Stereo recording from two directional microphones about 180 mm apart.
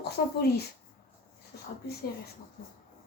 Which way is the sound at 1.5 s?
60° left (ahead or behind).